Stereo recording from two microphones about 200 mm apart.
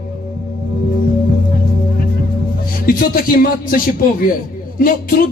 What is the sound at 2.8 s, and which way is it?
Speech, 45° left (ahead or behind).